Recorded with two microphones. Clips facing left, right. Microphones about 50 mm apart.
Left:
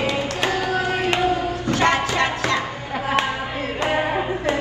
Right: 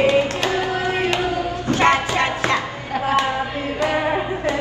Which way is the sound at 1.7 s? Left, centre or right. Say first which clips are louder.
Right 2 dB; right.